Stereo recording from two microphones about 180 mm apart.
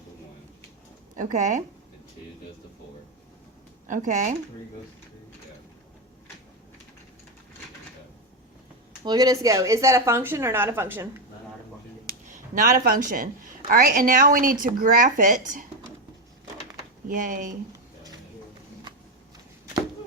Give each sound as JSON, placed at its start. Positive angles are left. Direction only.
{"t": 1.1, "sound": "a woman's voice", "side_deg": -45}
{"t": 3.8, "sound": "a woman's voice", "side_deg": -45}
{"t": 9.0, "sound": "a woman's voice", "side_deg": -20}
{"t": 12.0, "sound": "a woman's voice", "side_deg": -50}
{"t": 17.1, "sound": "a woman's voice", "side_deg": -50}